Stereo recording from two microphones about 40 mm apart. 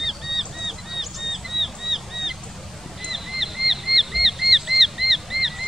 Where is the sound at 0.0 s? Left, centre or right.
Centre.